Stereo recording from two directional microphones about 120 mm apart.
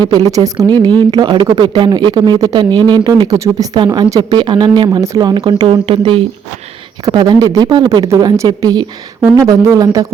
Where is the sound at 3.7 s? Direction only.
35° right (ahead or behind).